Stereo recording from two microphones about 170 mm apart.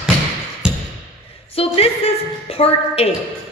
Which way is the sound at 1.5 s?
35° left (ahead or behind).